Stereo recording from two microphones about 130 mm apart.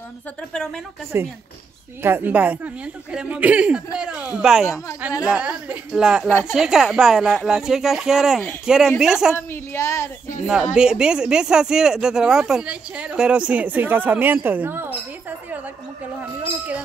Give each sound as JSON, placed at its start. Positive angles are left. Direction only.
{"t": 1.1, "sound": "speech", "side_deg": -20}
{"t": 9.3, "sound": "a woman's voice", "side_deg": 20}
{"t": 10.4, "sound": "speech", "side_deg": -5}